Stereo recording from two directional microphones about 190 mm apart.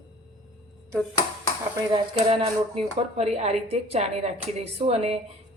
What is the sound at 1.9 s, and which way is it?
A woman's voice, 30° right (ahead or behind).